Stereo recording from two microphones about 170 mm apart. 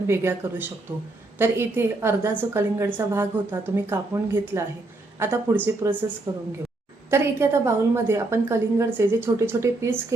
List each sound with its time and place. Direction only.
0.1 s a woman's voice: 15° right (ahead or behind)
6.3 s a woman's voice: 25° right (ahead or behind)